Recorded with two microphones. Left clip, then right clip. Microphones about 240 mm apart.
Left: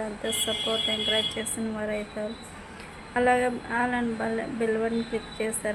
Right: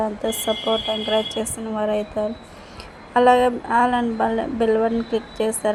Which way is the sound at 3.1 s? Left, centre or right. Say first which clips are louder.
Right 8 dB; centre.